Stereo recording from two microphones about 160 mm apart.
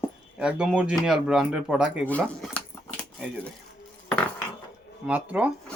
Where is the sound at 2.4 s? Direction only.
5° left (ahead or behind).